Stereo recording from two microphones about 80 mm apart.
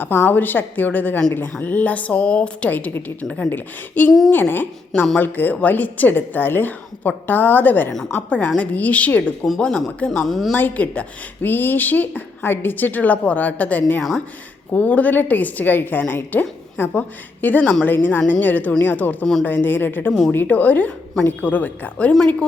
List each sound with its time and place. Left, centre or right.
0.0 s a woman's voice: left; by 10.5 s centre
10.5 s a woman's voice: centre
19.2 s a woman's voice: centre
19.5 s a woman's voice: left